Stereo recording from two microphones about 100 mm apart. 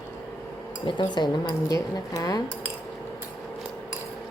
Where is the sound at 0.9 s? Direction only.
50° left (ahead or behind).